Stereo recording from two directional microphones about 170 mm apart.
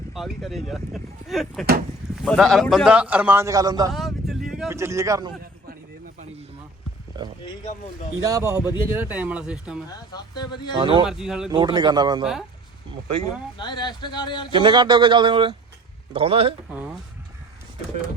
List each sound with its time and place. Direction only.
0.1 s a man's voice: centre (ahead or behind); by 3.9 s 20° right (ahead or behind)
3.9 s vehicle: centre (ahead or behind)
4.7 s a man's voice: 15° right (ahead or behind)
7.1 s a sound: 25° right (ahead or behind)
8.2 s a man's voice: 20° right (ahead or behind)
9.9 s speech: 25° left (ahead or behind)
10.8 s a man's voice: 30° right (ahead or behind)
11.0 s speech: 5° right (ahead or behind)
11.5 s speech: 25° right (ahead or behind)
12.2 s speech: centre (ahead or behind)
13.6 s speech: 25° left (ahead or behind)
14.5 s a man's voice: 25° right (ahead or behind)
16.6 s a man's voice: 5° right (ahead or behind)